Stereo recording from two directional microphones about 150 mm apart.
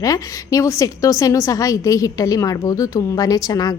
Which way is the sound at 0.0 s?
25° left (ahead or behind).